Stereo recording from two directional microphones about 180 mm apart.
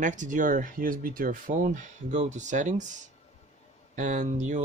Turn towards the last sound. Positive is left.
turn(degrees=-40)  # may be behind; listen again after turning